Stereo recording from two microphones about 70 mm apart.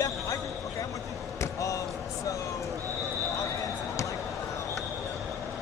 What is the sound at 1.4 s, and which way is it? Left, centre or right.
Slam, left.